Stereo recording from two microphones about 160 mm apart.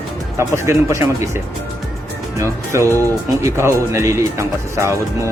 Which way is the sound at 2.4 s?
20° right (ahead or behind).